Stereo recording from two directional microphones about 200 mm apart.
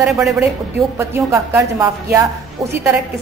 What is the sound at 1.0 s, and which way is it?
Speech, 15° right (ahead or behind).